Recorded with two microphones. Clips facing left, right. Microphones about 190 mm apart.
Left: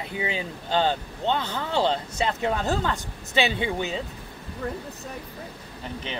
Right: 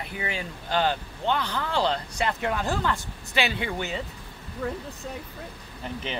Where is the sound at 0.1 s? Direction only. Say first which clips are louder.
Left 5 dB; 20° left (ahead or behind).